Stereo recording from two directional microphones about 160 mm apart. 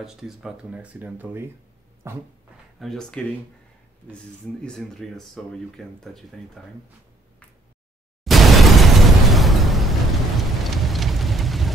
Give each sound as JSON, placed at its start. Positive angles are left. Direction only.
{"t": 0.0, "sound": "speech", "side_deg": -5}
{"t": 2.8, "sound": "speech", "side_deg": 5}
{"t": 8.2, "sound": "a sound", "side_deg": 0}